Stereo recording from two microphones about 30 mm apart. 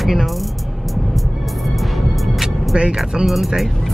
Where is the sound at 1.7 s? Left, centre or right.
Centre.